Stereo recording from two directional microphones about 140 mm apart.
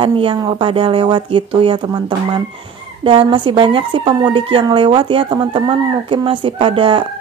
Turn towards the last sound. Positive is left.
turn(degrees=-40)  # may be behind; listen again after turning